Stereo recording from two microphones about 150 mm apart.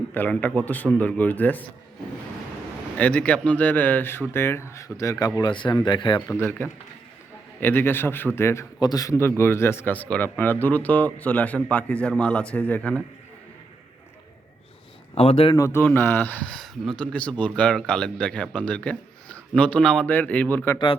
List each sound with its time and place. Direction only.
0.1 s speech: 10° left (ahead or behind)
3.0 s speech: 10° left (ahead or behind)
5.4 s speech: 30° left (ahead or behind)
6.4 s a man's voice: 10° left (ahead or behind)
15.1 s a man's voice: 40° left (ahead or behind)
15.5 s speech: 20° left (ahead or behind)